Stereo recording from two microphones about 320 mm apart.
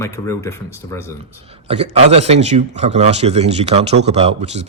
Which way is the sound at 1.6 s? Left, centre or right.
Centre.